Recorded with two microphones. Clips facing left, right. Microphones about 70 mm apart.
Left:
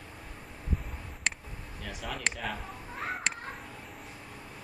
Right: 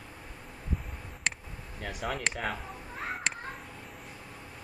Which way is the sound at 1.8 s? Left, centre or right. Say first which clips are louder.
Right 4 dB; right.